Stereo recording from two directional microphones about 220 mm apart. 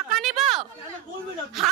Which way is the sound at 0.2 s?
Centre (ahead or behind).